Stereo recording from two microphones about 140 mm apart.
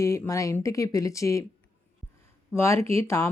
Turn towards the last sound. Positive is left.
turn(degrees=20)  # may be behind; listen again after turning